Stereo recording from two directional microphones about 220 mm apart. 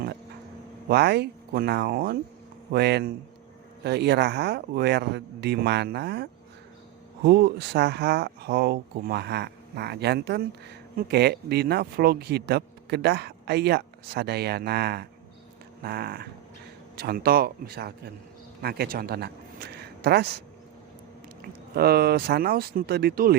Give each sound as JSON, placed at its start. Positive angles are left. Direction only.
{"t": 0.9, "sound": "speech", "side_deg": -50}
{"t": 7.3, "sound": "a man's voice", "side_deg": -45}
{"t": 21.8, "sound": "speech", "side_deg": -45}